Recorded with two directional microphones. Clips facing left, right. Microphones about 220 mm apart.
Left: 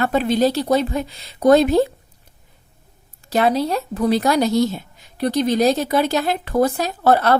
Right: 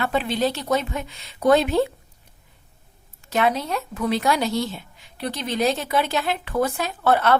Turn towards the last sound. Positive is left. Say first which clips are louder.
# left 3 dB
turn(degrees=40)  # may be behind; listen again after turning